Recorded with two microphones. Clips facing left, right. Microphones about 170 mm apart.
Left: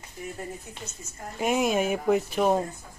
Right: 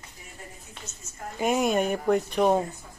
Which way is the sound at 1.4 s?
Centre (ahead or behind).